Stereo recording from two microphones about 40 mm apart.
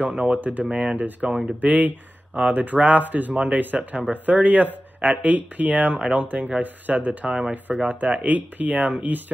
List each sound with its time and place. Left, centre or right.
0.1 s speech: right